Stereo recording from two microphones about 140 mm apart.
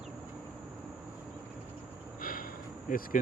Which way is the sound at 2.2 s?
85° left.